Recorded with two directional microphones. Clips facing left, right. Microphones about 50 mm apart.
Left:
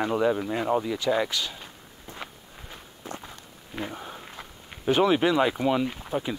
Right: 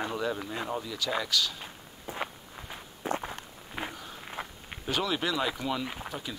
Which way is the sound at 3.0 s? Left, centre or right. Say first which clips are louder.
Right 7 dB; right.